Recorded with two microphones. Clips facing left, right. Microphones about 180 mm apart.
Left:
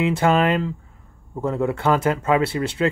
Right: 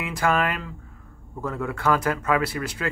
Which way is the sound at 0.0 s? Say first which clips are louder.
Left 6 dB; 25° left (ahead or behind).